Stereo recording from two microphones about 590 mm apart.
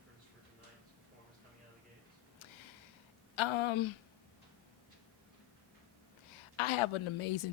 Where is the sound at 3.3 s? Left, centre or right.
Left.